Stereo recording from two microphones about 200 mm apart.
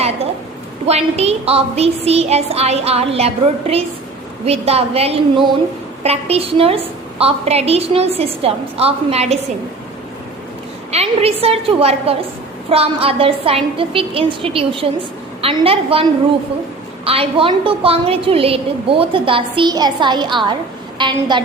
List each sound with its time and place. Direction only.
0.9 s child singing: 30° right (ahead or behind)
6.0 s a woman's voice: 30° right (ahead or behind)
10.9 s child singing: 30° right (ahead or behind)
12.7 s a woman's voice: 30° right (ahead or behind)
17.1 s a woman's voice: 30° right (ahead or behind)